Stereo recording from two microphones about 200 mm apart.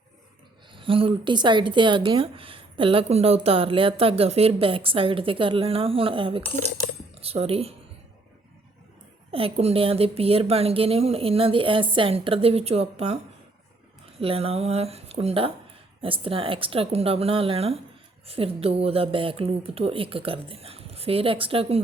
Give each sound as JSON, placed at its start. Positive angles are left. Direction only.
{"t": 0.7, "sound": "speech", "side_deg": -25}
{"t": 9.3, "sound": "speech", "side_deg": -30}
{"t": 14.2, "sound": "speech", "side_deg": -30}